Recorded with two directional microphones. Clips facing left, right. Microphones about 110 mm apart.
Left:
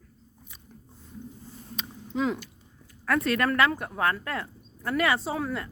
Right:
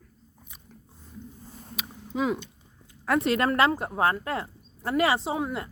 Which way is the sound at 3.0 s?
25° right (ahead or behind).